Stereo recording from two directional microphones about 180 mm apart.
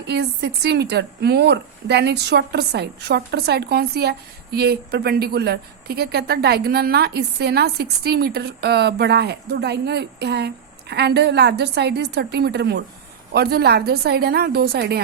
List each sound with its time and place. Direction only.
0.0 s a woman's voice: 70° right (ahead or behind)